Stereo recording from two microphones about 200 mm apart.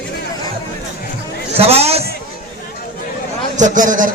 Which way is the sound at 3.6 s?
40° right (ahead or behind).